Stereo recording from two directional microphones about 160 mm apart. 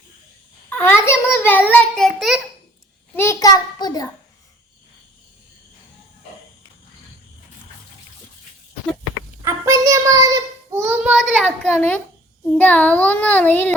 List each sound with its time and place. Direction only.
0.7 s a child's voice: 15° left (ahead or behind)
3.2 s a child's voice: 20° left (ahead or behind)
9.4 s child singing: 20° right (ahead or behind)
11.6 s a child's voice: 10° left (ahead or behind)